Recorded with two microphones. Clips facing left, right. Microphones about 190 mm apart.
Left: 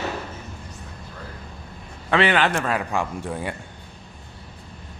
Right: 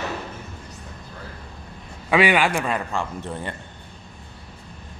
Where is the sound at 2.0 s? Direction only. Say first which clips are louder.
Right 1 dB; 10° right (ahead or behind).